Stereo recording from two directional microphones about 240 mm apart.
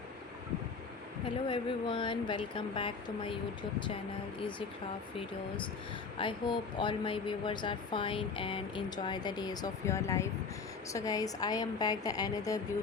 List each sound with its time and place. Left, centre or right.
1.5 s speech: centre
6.1 s a woman's voice: left